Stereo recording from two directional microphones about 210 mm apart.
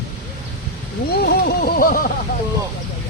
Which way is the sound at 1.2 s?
45° left (ahead or behind).